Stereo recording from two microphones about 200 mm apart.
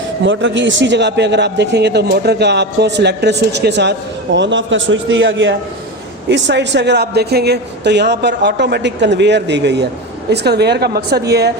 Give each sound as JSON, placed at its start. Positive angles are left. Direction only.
{"t": 0.3, "sound": "a man's voice", "side_deg": -65}